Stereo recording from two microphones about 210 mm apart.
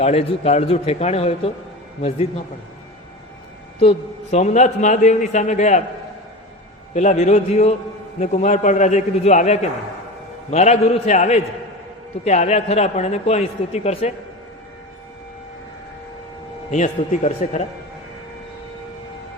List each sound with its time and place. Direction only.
0.0 s a man's voice: 30° left (ahead or behind)
3.8 s a man's voice: 30° left (ahead or behind)
6.9 s a man's voice: 35° left (ahead or behind)
16.7 s a man's voice: 35° left (ahead or behind)